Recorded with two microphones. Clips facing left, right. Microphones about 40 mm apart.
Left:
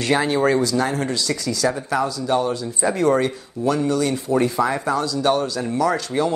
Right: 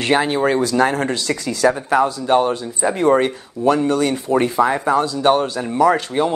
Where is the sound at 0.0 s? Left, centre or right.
Right.